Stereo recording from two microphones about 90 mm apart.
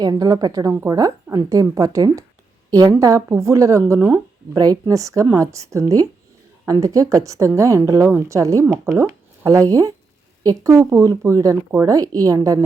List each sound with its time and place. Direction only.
0.0 s speech: 45° right (ahead or behind)